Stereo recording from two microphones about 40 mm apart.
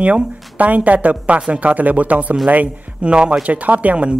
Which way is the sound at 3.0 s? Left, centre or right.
Right.